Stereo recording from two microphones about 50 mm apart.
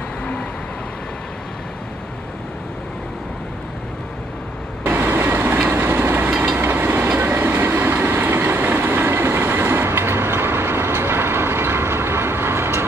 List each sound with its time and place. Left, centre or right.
4.8 s vehicle: right
5.7 s train: right